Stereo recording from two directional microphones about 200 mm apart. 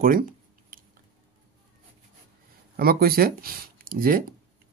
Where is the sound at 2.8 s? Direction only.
50° right (ahead or behind).